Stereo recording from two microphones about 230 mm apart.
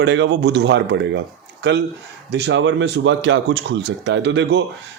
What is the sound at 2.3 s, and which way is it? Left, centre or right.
A man's voice, right.